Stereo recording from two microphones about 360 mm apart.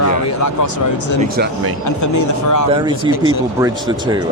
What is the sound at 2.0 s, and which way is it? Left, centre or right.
Speech, left.